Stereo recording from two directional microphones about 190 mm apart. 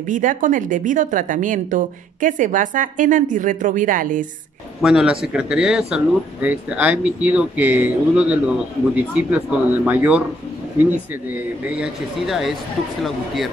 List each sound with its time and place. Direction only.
0.1 s speech: 45° right (ahead or behind)
4.8 s speech: 5° right (ahead or behind)